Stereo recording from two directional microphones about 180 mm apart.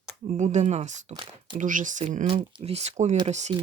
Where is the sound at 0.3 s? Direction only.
40° right (ahead or behind).